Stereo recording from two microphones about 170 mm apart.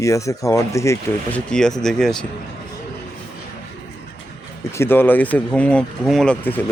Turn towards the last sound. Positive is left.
turn(degrees=10)  # may be behind; listen again after turning